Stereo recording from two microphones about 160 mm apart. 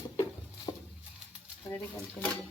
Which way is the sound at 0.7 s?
25° left (ahead or behind).